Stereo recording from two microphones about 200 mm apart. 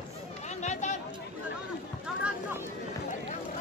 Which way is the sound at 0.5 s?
35° left (ahead or behind).